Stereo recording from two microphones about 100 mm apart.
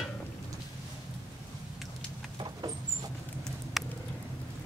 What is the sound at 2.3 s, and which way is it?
Rodents, 45° right (ahead or behind).